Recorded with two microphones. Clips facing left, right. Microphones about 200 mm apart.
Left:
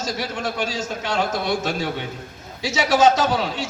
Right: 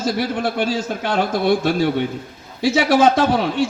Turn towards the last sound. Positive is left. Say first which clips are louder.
# right 5 dB
turn(degrees=-55)  # may be behind; listen again after turning